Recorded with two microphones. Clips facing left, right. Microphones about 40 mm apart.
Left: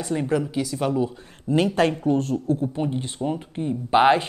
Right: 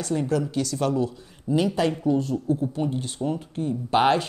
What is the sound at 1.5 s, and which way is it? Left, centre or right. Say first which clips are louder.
Speech: left 2 dB; left.